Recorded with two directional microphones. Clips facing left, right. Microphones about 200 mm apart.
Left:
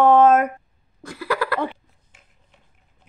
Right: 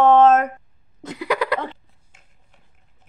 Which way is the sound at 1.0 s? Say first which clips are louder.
Right 2 dB; 20° right (ahead or behind).